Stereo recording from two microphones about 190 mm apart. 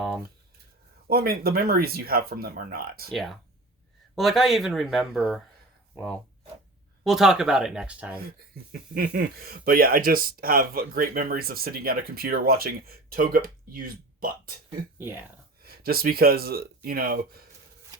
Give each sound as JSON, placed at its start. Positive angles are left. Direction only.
{"t": 1.0, "sound": "speech", "side_deg": -55}
{"t": 4.1, "sound": "speech", "side_deg": 0}
{"t": 9.0, "sound": "speech", "side_deg": -50}
{"t": 14.9, "sound": "speech", "side_deg": -10}
{"t": 15.6, "sound": "speech", "side_deg": -55}